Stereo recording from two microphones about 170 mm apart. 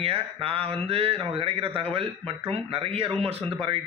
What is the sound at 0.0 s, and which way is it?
A man's voice, 35° right (ahead or behind).